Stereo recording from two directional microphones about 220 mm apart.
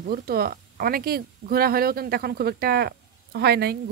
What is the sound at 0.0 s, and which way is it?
Speech, 45° right (ahead or behind).